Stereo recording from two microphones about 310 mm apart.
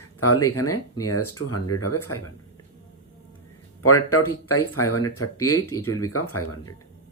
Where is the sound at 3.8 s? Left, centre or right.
Left.